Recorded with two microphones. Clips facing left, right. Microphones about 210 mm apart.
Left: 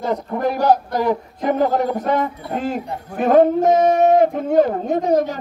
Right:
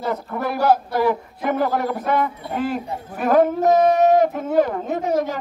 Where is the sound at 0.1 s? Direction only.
20° left (ahead or behind).